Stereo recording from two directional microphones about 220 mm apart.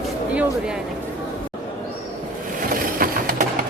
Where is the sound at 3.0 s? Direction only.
40° right (ahead or behind).